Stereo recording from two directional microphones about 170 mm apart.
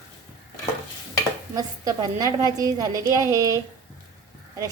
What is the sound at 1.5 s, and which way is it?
A woman's voice, 20° right (ahead or behind).